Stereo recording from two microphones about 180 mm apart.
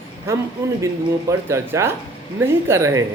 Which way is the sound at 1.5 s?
15° right (ahead or behind).